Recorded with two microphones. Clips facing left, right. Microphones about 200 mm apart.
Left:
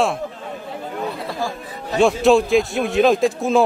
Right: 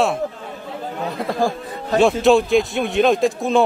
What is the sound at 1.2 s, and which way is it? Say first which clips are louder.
Music: right 5 dB; 50° right (ahead or behind).